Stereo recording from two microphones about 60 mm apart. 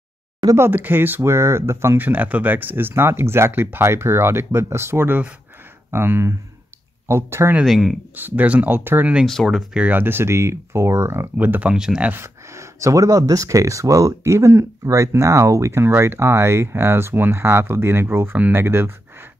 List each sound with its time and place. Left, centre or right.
0.6 s speech: right
2.0 s speech: right
2.9 s speech: right
7.6 s speech: centre
8.2 s speech: right
9.2 s speech: centre
9.9 s speech: right
11.3 s speech: right
11.7 s speech: centre
12.2 s speech: right